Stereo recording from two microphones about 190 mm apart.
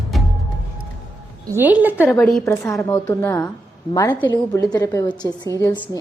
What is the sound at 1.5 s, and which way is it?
Speech, 10° right (ahead or behind).